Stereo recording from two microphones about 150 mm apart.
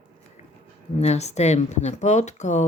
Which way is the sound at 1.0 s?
45° left (ahead or behind).